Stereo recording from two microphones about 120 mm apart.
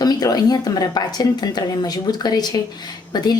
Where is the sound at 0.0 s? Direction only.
35° left (ahead or behind).